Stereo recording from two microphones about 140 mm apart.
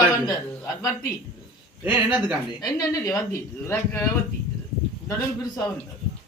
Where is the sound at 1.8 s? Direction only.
10° right (ahead or behind).